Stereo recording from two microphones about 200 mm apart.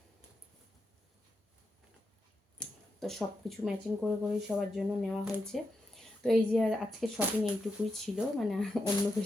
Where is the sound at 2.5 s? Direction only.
5° left (ahead or behind).